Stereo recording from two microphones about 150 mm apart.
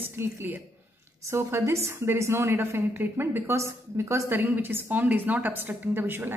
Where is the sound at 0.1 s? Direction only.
15° right (ahead or behind).